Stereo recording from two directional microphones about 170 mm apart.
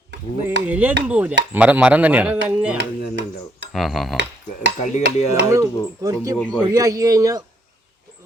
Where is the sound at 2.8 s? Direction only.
90° right.